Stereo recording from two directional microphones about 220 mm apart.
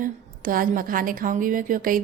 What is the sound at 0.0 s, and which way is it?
Speech, 40° right (ahead or behind).